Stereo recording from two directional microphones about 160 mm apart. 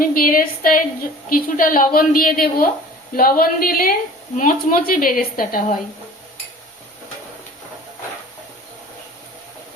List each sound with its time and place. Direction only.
0.0 s a woman's voice: 60° left (ahead or behind)